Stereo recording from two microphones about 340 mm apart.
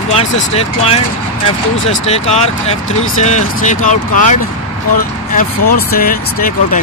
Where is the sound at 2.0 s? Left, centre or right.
Centre.